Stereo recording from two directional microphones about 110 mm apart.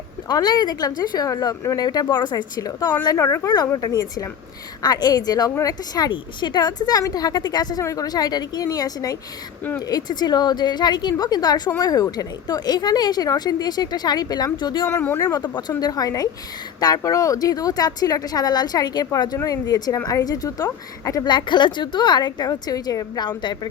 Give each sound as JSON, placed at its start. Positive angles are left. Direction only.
{"t": 0.3, "sound": "speech", "side_deg": 40}
{"t": 14.8, "sound": "speech", "side_deg": 20}
{"t": 15.2, "sound": "speech", "side_deg": 35}
{"t": 21.3, "sound": "speech", "side_deg": 45}